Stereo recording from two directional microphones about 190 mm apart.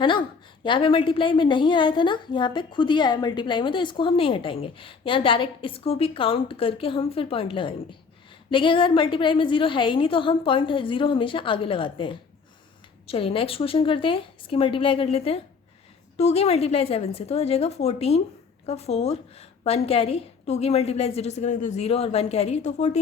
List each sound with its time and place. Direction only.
0.0 s a woman's voice: 25° left (ahead or behind)